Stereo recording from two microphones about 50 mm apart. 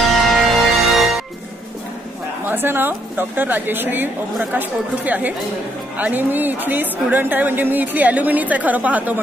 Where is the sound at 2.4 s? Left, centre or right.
Right.